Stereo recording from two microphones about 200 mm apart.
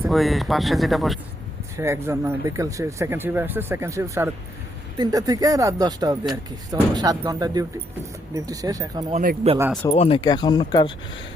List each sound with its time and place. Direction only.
0.1 s speech: centre (ahead or behind)
1.7 s speech: 15° right (ahead or behind)
9.1 s speech: 35° right (ahead or behind)
9.9 s speech: 30° left (ahead or behind)